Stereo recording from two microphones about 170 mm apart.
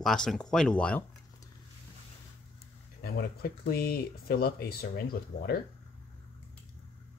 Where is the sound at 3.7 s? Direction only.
65° left (ahead or behind).